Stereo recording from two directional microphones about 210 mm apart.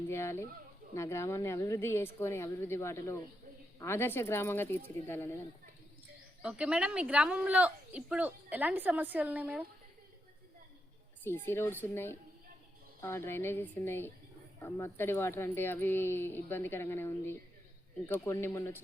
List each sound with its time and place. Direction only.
0.1 s speech: 10° left (ahead or behind)
6.4 s a woman's voice: 5° right (ahead or behind)
11.2 s speech: 10° left (ahead or behind)